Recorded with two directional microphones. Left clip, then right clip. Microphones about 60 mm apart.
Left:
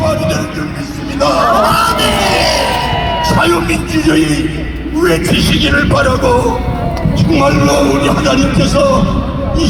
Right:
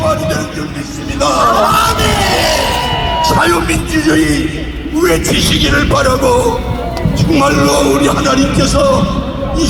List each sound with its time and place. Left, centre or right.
0.0 s music: right
3.3 s speech: right